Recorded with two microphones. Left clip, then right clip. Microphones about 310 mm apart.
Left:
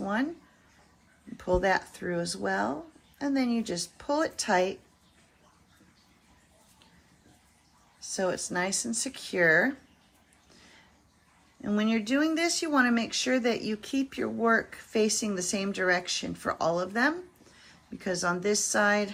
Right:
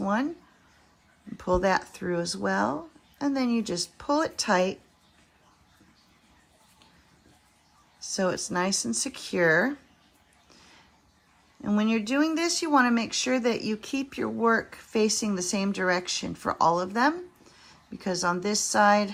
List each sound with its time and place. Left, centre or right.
0.0 s a sound: centre
1.4 s speech: centre
7.9 s speech: centre
11.6 s speech: centre